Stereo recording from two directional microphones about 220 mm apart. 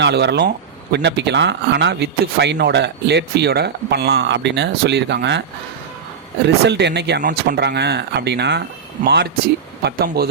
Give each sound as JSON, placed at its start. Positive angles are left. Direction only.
{"t": 0.0, "sound": "speech", "side_deg": -50}
{"t": 6.7, "sound": "speech", "side_deg": -50}